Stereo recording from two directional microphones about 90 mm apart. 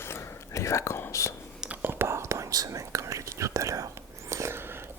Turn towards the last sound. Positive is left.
turn(degrees=-25)  # may be behind; listen again after turning